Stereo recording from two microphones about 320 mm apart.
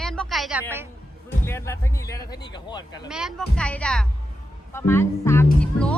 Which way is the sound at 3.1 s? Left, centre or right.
Centre.